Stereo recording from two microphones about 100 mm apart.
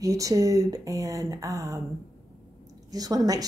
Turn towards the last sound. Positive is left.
turn(degrees=-35)  # may be behind; listen again after turning